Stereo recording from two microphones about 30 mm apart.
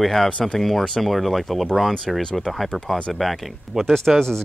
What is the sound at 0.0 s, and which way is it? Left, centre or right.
Speech, centre.